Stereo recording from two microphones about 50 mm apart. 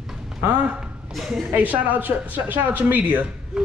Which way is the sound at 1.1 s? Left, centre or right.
Centre.